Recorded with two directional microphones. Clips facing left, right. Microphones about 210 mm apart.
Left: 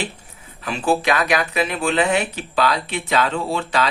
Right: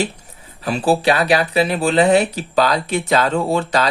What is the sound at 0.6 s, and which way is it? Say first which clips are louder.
Speech: right 4 dB; 35° right (ahead or behind).